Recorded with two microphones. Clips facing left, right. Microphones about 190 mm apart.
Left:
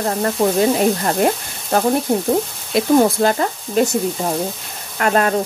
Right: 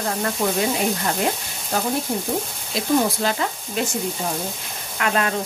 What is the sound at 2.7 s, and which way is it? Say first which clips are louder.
Speech: left 6 dB; 50° left (ahead or behind).